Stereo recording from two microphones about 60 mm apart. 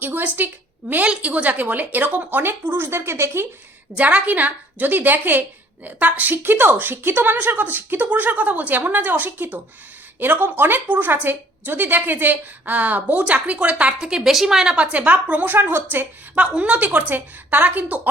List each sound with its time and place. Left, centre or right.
0.0 s a woman's voice: right
1.0 s a woman's voice: centre
2.8 s a woman's voice: right
3.9 s a woman's voice: right; by 14.8 s centre
14.9 s a woman's voice: right
15.4 s a woman's voice: right